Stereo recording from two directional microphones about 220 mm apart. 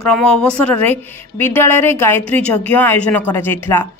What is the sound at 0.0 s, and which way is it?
A woman's voice, 5° left (ahead or behind).